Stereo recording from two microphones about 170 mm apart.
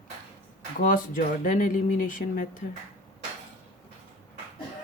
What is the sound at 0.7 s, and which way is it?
Speech, 55° left (ahead or behind).